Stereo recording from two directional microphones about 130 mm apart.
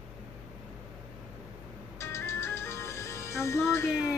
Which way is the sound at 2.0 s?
20° left (ahead or behind).